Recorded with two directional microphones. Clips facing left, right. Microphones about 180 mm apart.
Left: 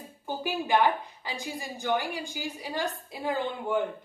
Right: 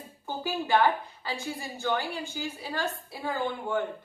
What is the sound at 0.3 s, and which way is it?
A woman's voice, 15° left (ahead or behind).